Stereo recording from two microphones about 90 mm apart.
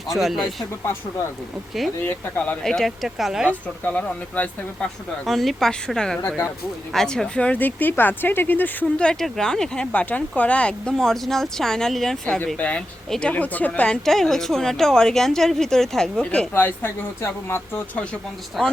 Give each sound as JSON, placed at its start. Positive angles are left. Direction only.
{"t": 0.1, "sound": "a woman's voice", "side_deg": 0}
{"t": 2.0, "sound": "speech", "side_deg": 25}
{"t": 2.6, "sound": "a woman's voice", "side_deg": 5}
{"t": 3.5, "sound": "speech", "side_deg": 15}
{"t": 5.2, "sound": "a woman's voice", "side_deg": 0}
{"t": 12.5, "sound": "a woman's voice", "side_deg": 15}
{"t": 16.6, "sound": "speech", "side_deg": 20}
{"t": 17.9, "sound": "speech", "side_deg": 10}
{"t": 18.6, "sound": "a woman's voice", "side_deg": 0}